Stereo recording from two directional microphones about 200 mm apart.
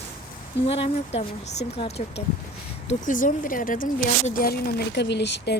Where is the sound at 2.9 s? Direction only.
40° left (ahead or behind); by 5.5 s 60° left (ahead or behind).